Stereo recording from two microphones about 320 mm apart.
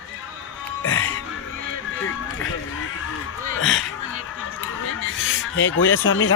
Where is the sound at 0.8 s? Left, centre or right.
Left.